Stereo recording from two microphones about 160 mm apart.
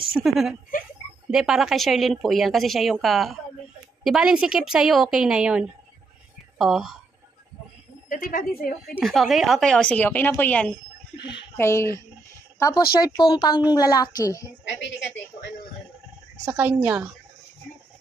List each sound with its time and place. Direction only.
0.1 s speech: centre (ahead or behind)
8.1 s a woman's voice: 60° left (ahead or behind)
9.0 s speech: centre (ahead or behind)
11.1 s a woman's voice: 90° left
11.5 s a woman's voice: 15° left (ahead or behind)
14.6 s a woman's voice: 90° left
16.5 s a woman's voice: 10° right (ahead or behind)